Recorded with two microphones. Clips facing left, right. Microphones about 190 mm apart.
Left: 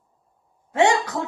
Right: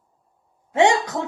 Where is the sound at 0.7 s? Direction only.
20° right (ahead or behind).